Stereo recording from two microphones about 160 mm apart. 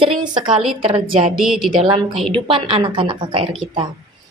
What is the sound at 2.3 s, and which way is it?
Speech, 35° right (ahead or behind).